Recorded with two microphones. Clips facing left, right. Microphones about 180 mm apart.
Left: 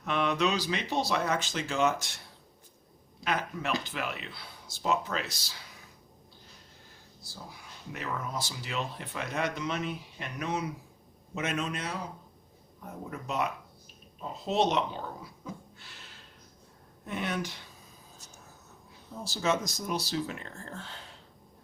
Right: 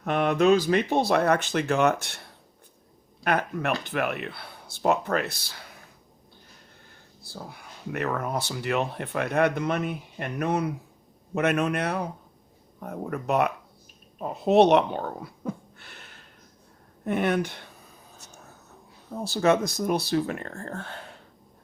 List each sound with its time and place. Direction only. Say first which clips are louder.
0.0 s speech: right 7 dB; 50° right (ahead or behind)
7.2 s speech: right 6 dB; 60° right (ahead or behind)
18.2 s whispering: right 4 dB; 65° right (ahead or behind)
19.1 s speech: right 8 dB; 60° right (ahead or behind)